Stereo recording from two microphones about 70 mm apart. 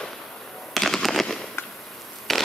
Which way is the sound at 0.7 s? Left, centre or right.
Centre.